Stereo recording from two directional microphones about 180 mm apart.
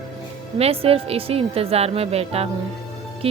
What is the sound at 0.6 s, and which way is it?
Speech, 35° right (ahead or behind).